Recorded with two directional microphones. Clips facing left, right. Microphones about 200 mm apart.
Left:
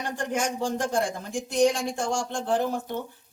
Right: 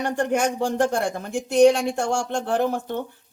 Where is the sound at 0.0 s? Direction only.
65° right (ahead or behind).